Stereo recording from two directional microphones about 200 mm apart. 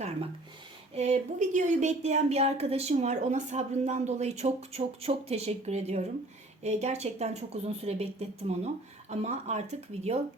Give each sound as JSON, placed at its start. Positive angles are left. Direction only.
{"t": 0.9, "sound": "speech", "side_deg": -35}